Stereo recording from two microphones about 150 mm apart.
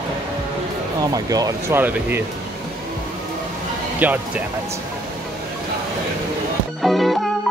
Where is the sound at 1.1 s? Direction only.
25° right (ahead or behind).